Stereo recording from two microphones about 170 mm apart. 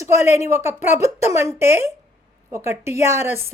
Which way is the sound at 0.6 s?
45° left (ahead or behind).